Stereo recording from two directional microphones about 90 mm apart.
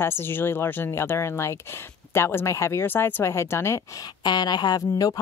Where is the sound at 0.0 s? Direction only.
25° left (ahead or behind).